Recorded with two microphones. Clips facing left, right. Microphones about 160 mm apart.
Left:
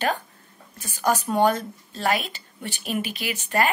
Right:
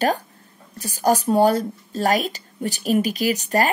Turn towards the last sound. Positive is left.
turn(degrees=-40)  # may be behind; listen again after turning